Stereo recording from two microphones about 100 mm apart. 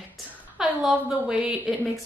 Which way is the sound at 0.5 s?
5° right (ahead or behind).